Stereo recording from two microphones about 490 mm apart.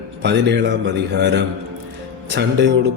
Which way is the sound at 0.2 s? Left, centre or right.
Right.